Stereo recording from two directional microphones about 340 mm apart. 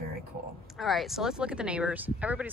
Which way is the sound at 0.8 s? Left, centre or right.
Centre.